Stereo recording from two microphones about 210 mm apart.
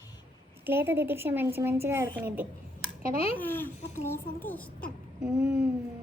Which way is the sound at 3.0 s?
40° right (ahead or behind).